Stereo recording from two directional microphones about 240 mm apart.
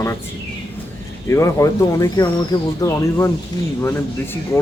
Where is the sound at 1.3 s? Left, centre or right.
Centre.